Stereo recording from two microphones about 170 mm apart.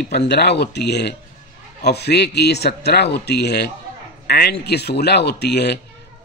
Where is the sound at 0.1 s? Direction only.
80° left.